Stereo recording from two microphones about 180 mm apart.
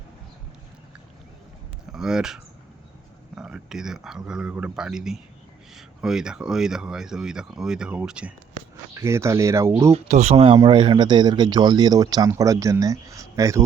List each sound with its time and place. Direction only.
1.9 s a sound: 5° right (ahead or behind)
3.3 s speech: 5° right (ahead or behind)
9.9 s speech: 35° right (ahead or behind); by 13.6 s 15° right (ahead or behind)